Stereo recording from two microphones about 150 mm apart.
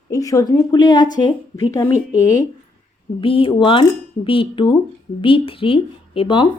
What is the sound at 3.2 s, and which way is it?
Speech, 35° left (ahead or behind).